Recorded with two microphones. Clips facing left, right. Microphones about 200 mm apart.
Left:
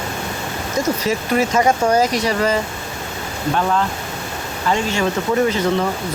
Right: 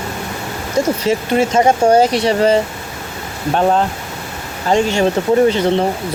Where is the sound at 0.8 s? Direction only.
30° right (ahead or behind).